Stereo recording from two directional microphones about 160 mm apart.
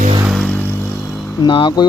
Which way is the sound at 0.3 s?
5° left (ahead or behind).